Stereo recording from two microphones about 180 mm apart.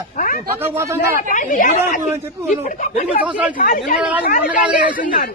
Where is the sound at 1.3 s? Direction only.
45° left (ahead or behind).